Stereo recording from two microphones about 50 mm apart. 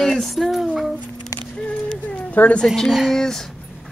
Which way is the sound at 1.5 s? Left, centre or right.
Left.